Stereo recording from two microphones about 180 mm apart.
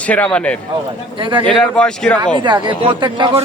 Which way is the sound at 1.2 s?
25° right (ahead or behind).